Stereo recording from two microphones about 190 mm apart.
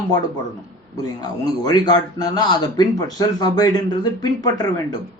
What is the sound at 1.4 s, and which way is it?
Speech, 20° left (ahead or behind).